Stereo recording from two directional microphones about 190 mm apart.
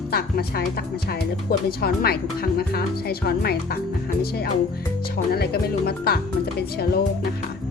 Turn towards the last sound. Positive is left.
turn(degrees=55)  # may be behind; listen again after turning